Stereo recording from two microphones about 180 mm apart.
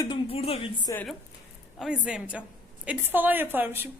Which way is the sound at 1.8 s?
5° right (ahead or behind).